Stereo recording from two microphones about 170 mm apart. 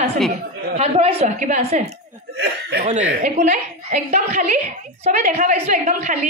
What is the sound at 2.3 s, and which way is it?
Speech, 80° right.